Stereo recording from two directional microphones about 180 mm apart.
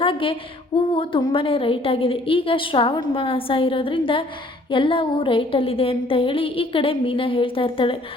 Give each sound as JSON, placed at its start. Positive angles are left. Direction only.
{"t": 0.0, "sound": "female singing", "side_deg": 30}
{"t": 0.9, "sound": "a woman's voice", "side_deg": 30}